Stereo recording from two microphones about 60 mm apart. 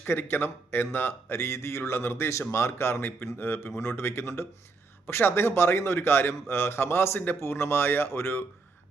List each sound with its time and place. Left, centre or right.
0.1 s speech: left